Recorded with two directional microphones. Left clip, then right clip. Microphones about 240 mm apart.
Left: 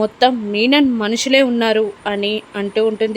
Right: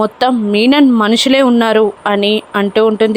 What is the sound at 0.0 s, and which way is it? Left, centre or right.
Speech, centre.